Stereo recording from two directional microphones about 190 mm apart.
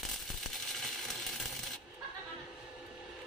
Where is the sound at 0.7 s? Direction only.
Centre (ahead or behind).